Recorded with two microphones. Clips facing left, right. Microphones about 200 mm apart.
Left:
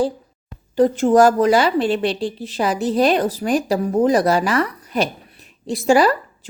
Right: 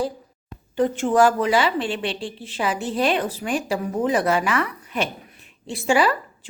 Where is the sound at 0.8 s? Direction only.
40° left (ahead or behind).